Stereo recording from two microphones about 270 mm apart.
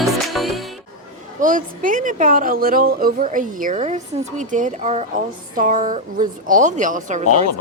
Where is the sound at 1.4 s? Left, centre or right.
Right.